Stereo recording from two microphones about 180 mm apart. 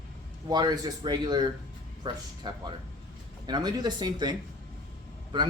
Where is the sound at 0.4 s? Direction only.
20° right (ahead or behind).